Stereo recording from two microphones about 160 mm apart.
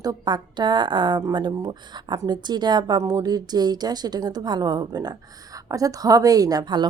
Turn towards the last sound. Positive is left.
turn(degrees=-25)  # may be behind; listen again after turning